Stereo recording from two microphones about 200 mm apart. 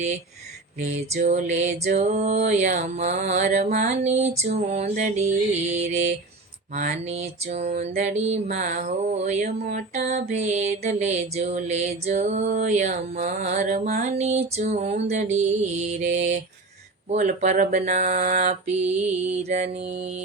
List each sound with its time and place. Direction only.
0.8 s mantra: 35° right (ahead or behind)